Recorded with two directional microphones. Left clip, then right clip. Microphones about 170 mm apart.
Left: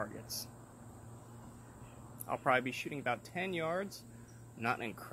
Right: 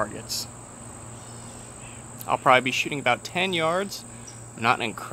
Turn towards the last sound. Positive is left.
turn(degrees=-15)  # may be behind; listen again after turning